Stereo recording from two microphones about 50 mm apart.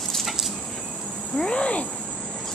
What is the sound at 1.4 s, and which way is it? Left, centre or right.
Speech, centre.